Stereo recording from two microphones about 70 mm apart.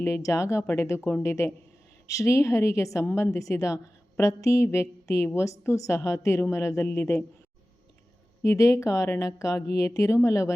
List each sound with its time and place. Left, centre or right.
0.0 s a woman's voice: left
8.4 s a woman's voice: left